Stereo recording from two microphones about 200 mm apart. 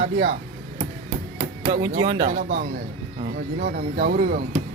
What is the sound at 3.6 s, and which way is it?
Speech, 45° right (ahead or behind).